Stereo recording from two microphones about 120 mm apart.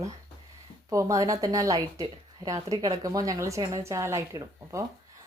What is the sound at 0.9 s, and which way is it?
Speech, 25° right (ahead or behind).